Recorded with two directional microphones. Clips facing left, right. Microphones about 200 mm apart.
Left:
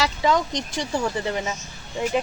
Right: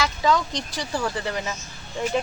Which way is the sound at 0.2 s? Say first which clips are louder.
Even; 20° left (ahead or behind).